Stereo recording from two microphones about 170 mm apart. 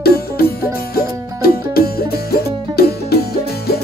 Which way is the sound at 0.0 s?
65° left (ahead or behind).